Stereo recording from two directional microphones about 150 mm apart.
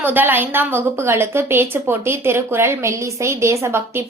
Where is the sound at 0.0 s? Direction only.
10° right (ahead or behind).